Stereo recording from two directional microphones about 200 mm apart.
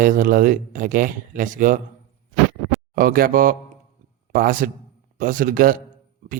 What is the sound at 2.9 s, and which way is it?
A man's voice, 45° right (ahead or behind).